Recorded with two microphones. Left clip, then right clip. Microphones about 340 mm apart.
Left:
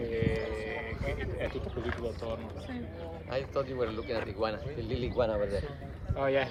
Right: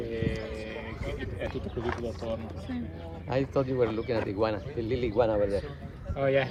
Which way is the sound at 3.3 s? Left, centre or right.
Centre.